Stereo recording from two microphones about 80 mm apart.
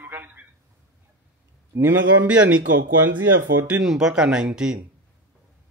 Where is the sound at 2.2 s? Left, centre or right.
Centre.